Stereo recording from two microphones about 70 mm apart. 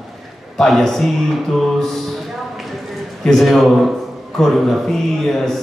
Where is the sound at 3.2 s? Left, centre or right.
Centre.